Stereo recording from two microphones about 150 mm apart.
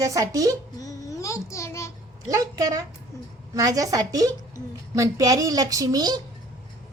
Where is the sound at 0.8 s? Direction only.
25° left (ahead or behind).